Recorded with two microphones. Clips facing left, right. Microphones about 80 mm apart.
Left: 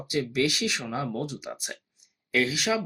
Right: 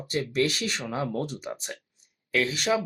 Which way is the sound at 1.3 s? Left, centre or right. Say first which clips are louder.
Right 1 dB; centre.